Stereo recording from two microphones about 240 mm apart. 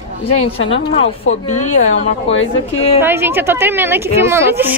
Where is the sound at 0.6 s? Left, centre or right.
Left.